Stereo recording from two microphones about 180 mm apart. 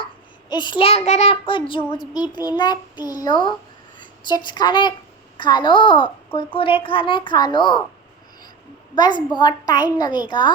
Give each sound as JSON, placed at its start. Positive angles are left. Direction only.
{"t": 0.5, "sound": "a woman's voice", "side_deg": 25}
{"t": 9.0, "sound": "a woman's voice", "side_deg": 25}